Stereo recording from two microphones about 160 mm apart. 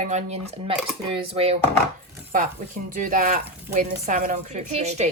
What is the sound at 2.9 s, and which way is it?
A woman's voice, 55° right (ahead or behind).